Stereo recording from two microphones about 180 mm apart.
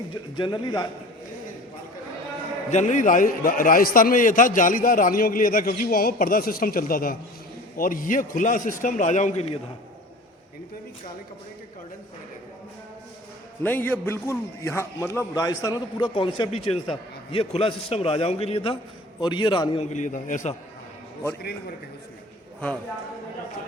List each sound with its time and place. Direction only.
0.1 s a man's voice: 25° left (ahead or behind)
2.6 s a man's voice: 40° left (ahead or behind)
13.6 s a man's voice: 10° left (ahead or behind); by 19.8 s 25° left (ahead or behind)
19.9 s a man's voice: 45° left (ahead or behind)